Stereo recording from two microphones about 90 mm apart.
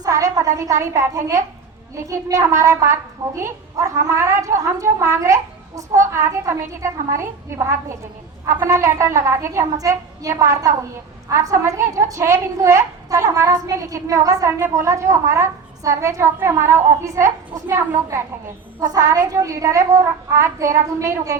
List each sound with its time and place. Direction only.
0.0 s a woman's voice: 40° right (ahead or behind)
18.8 s a child's voice: 45° right (ahead or behind)